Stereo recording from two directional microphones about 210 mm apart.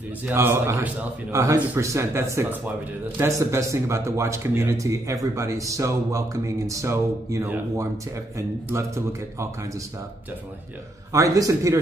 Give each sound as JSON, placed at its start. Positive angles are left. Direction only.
{"t": 0.3, "sound": "speech", "side_deg": -10}
{"t": 11.1, "sound": "speech", "side_deg": -15}